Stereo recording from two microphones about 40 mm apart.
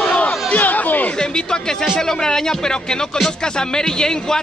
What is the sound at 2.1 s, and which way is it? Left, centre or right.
Speech, centre.